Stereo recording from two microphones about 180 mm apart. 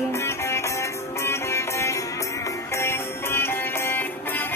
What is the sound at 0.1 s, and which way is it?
Music, 15° left (ahead or behind).